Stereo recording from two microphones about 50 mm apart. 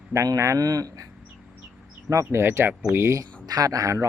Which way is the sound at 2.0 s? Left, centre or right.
Right.